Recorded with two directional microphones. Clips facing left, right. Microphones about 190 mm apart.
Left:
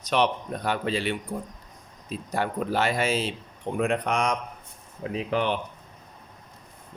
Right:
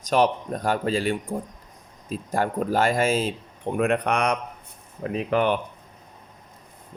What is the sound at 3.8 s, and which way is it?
Speech, 60° right (ahead or behind).